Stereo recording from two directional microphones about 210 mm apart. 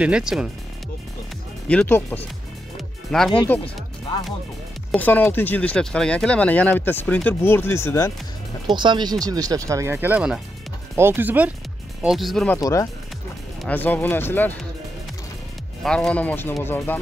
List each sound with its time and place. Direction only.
0.0 s speech: 5° right (ahead or behind)
1.7 s speech: 10° left (ahead or behind)
4.9 s speech: 10° left (ahead or behind)
8.7 s speech: 20° right (ahead or behind); by 12.5 s centre (ahead or behind)
12.5 s speech: 15° left (ahead or behind)
15.8 s speech: 5° left (ahead or behind)